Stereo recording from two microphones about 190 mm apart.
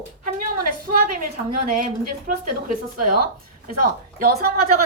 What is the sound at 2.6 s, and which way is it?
A woman's voice, 45° right (ahead or behind).